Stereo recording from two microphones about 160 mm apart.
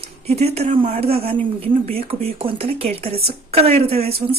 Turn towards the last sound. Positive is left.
turn(degrees=-40)  # may be behind; listen again after turning